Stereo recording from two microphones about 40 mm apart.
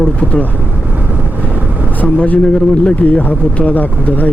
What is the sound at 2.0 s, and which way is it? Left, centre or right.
Speech, left.